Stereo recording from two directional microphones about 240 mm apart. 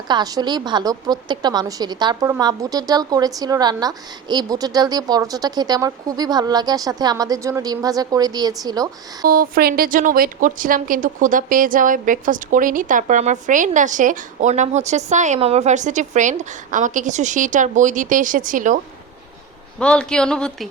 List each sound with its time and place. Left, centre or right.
0.1 s a woman's voice: centre
9.2 s speech: right
19.8 s speech: centre